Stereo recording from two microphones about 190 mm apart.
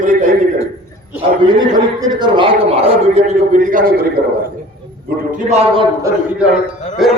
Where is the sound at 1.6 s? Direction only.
20° right (ahead or behind).